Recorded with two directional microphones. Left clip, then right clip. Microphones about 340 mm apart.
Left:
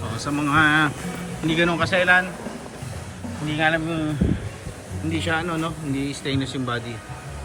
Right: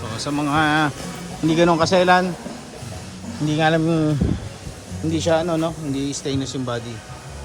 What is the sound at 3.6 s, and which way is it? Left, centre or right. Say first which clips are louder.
Speech: right 3 dB; centre.